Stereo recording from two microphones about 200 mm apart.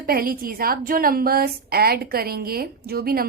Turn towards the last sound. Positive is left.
turn(degrees=-50)  # may be behind; listen again after turning